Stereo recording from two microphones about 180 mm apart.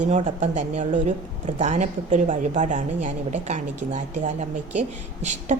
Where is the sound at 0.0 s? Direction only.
45° right (ahead or behind).